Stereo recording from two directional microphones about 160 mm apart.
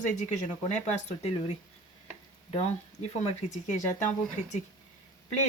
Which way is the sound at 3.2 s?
45° left (ahead or behind).